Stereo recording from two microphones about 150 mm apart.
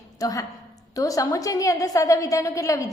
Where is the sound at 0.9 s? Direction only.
20° left (ahead or behind).